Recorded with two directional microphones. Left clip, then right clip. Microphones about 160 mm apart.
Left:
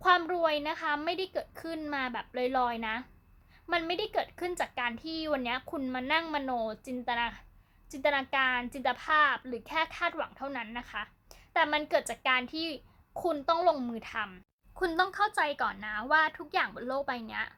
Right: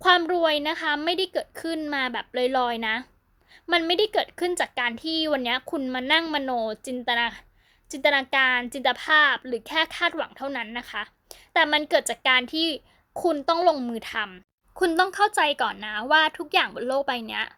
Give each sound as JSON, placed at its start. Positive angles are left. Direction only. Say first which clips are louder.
{"t": 0.0, "sound": "speech", "louder": "right 6 dB", "side_deg": -50}